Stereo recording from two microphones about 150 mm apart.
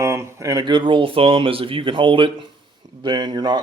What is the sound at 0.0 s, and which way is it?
Speech, 20° right (ahead or behind).